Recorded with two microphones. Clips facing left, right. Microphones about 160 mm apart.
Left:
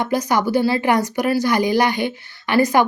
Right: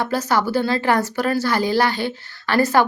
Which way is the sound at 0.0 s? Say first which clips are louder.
Left 1 dB; 15° left (ahead or behind).